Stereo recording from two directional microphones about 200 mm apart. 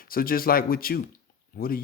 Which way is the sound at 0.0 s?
45° left (ahead or behind).